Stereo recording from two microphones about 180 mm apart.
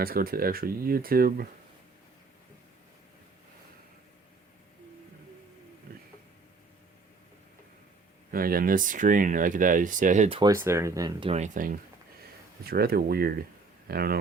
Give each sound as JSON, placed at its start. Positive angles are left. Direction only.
{"t": 0.0, "sound": "speech", "side_deg": -55}
{"t": 8.3, "sound": "speech", "side_deg": -55}
{"t": 10.2, "sound": "speech", "side_deg": -30}
{"t": 10.5, "sound": "speech", "side_deg": -15}
{"t": 11.3, "sound": "speech", "side_deg": -40}